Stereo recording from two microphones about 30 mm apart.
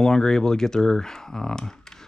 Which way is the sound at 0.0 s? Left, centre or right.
Centre.